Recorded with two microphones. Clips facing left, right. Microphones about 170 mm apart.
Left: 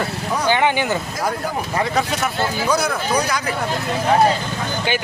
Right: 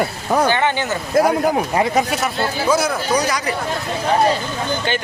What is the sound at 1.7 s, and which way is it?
Speech, 20° right (ahead or behind).